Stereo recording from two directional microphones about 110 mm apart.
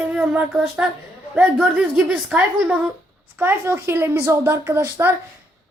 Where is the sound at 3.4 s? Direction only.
20° right (ahead or behind).